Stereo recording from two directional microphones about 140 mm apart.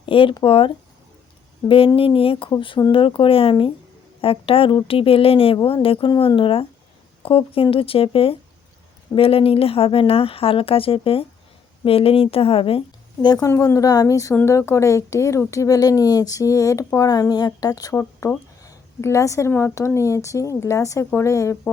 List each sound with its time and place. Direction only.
0.0 s a woman's voice: 40° left (ahead or behind)
13.2 s speech: 30° left (ahead or behind)